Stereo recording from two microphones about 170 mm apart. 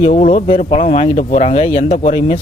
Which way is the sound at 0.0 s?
45° left (ahead or behind).